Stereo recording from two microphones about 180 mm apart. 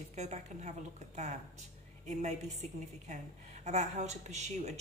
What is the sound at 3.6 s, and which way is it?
A woman's voice, 40° right (ahead or behind).